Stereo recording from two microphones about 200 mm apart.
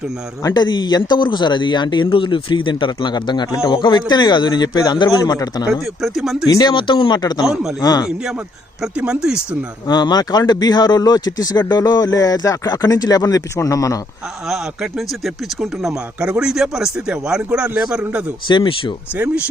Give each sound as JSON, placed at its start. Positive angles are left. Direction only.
{"t": 0.4, "sound": "a man's voice", "side_deg": 20}
{"t": 5.8, "sound": "a man's voice", "side_deg": 0}
{"t": 6.5, "sound": "a man's voice", "side_deg": 20}
{"t": 7.4, "sound": "a man's voice", "side_deg": 0}
{"t": 7.8, "sound": "speech", "side_deg": 20}
{"t": 8.8, "sound": "a man's voice", "side_deg": -5}
{"t": 9.8, "sound": "a man's voice", "side_deg": 20}
{"t": 14.4, "sound": "a man's voice", "side_deg": 0}
{"t": 18.4, "sound": "a man's voice", "side_deg": 25}
{"t": 19.1, "sound": "speech", "side_deg": -5}